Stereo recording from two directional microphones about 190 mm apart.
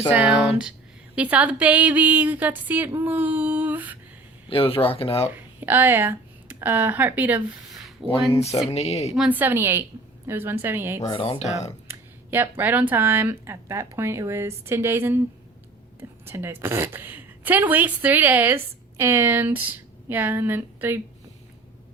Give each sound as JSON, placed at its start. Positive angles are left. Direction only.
{"t": 0.1, "sound": "speech", "side_deg": -5}
{"t": 4.4, "sound": "speech", "side_deg": 30}
{"t": 5.3, "sound": "speech", "side_deg": -10}
{"t": 8.4, "sound": "speech", "side_deg": 35}
{"t": 9.1, "sound": "speech", "side_deg": -5}
{"t": 11.0, "sound": "speech", "side_deg": 30}
{"t": 11.9, "sound": "a woman's voice", "side_deg": -10}